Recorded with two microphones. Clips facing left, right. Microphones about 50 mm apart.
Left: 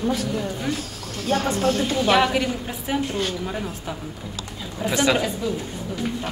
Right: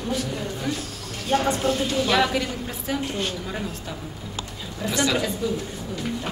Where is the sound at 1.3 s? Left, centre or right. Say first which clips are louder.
Even; centre.